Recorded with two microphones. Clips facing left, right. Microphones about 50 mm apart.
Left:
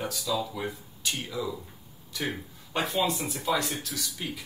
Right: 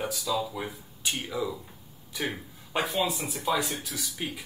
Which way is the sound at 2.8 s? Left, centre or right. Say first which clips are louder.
Even; centre.